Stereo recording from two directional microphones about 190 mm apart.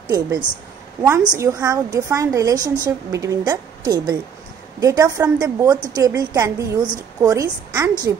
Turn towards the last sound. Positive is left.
turn(degrees=-15)  # may be behind; listen again after turning